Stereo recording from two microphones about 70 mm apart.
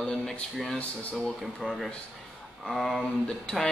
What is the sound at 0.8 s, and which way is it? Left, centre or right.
Speech, left.